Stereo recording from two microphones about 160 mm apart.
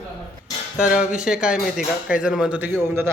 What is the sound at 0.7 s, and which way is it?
Speech, 5° right (ahead or behind).